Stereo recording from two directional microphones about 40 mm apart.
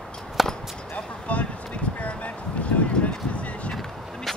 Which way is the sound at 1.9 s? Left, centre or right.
Left.